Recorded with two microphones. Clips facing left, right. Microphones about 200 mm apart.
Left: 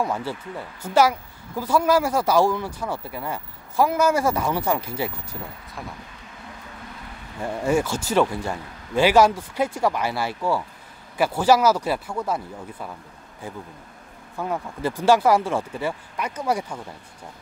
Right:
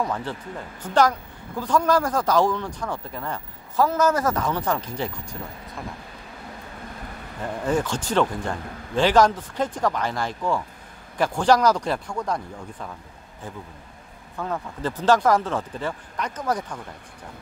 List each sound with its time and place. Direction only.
0.0 s speech: 10° left (ahead or behind)
7.4 s speech: 10° left (ahead or behind)
14.3 s speech: 10° left (ahead or behind)